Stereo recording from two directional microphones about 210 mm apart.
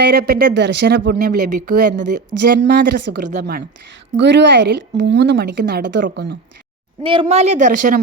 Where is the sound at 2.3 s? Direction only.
5° right (ahead or behind).